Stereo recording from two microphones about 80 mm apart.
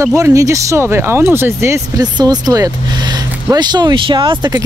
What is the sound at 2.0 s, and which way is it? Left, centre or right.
Speech, right.